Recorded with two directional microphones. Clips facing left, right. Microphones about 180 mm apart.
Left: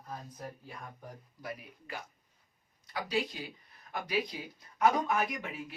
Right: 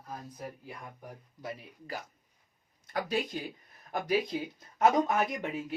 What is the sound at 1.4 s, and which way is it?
Speech, 35° right (ahead or behind).